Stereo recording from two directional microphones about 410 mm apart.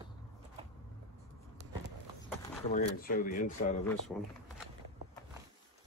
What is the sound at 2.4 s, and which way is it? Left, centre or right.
Speech, centre.